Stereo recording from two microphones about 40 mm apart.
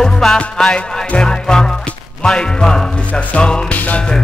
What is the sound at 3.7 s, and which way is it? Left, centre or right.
Music, left.